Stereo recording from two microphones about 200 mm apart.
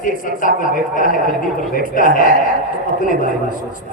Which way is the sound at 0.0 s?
40° left (ahead or behind).